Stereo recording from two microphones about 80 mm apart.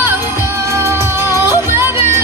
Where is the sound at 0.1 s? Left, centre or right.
Right.